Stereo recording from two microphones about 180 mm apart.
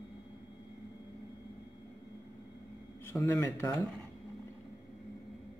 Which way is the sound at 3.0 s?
15° left (ahead or behind).